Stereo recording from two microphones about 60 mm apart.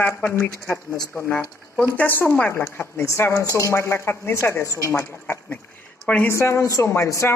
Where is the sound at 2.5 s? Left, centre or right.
Left.